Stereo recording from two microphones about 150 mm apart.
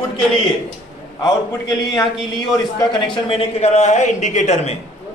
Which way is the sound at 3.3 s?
40° left (ahead or behind).